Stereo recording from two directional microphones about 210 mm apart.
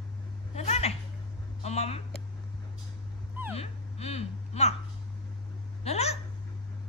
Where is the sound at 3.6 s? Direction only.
30° left (ahead or behind).